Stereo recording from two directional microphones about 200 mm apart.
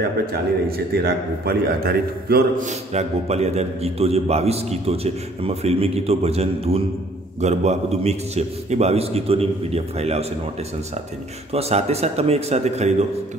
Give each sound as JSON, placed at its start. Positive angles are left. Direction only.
{"t": 0.3, "sound": "a man's voice", "side_deg": -50}
{"t": 2.9, "sound": "a man's voice", "side_deg": -35}
{"t": 11.5, "sound": "a man's voice", "side_deg": -30}